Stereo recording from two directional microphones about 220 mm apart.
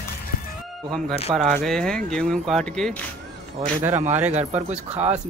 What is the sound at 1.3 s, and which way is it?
Speech, centre (ahead or behind).